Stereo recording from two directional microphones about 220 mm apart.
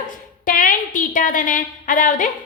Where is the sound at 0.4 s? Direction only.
40° left (ahead or behind).